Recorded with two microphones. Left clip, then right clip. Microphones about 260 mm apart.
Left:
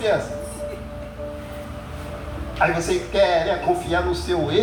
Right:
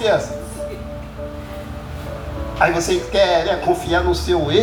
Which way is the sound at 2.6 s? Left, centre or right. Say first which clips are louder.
Right 4 dB; right.